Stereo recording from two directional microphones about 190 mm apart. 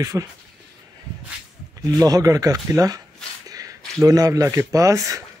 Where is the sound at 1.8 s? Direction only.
20° right (ahead or behind).